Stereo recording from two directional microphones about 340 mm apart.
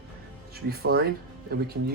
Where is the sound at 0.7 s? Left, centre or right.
Right.